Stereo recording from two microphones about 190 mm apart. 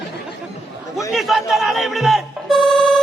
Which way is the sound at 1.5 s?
Centre (ahead or behind).